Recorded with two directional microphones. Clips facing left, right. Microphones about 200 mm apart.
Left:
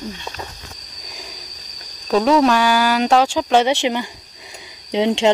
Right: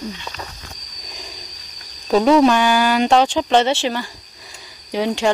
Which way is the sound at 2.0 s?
Centre (ahead or behind).